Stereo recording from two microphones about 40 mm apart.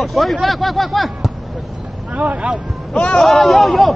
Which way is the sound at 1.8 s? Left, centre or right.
Right.